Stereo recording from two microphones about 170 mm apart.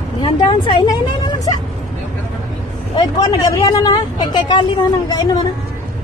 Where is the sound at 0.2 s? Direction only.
25° left (ahead or behind).